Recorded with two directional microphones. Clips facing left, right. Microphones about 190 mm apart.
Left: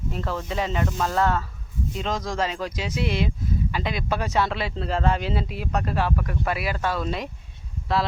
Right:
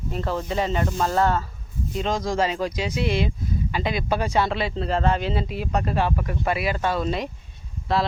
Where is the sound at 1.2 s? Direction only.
30° right (ahead or behind).